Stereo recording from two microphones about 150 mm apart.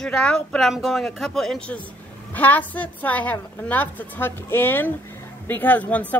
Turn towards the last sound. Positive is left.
turn(degrees=10)  # may be behind; listen again after turning